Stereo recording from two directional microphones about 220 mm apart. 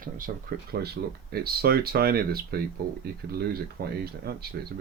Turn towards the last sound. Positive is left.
turn(degrees=-45)  # may be behind; listen again after turning